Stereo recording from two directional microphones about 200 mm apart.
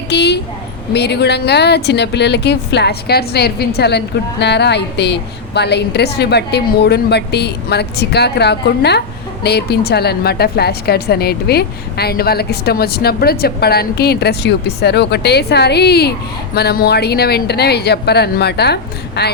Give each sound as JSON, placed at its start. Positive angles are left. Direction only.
{"t": 0.1, "sound": "a woman's voice", "side_deg": 55}